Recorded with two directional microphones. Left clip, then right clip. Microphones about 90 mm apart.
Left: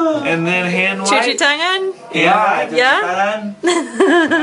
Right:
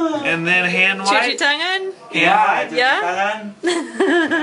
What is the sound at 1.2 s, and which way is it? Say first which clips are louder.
Laughter: left 3 dB; centre (ahead or behind).